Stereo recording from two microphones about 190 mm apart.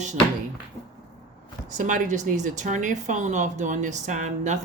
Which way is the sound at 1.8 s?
45° right (ahead or behind).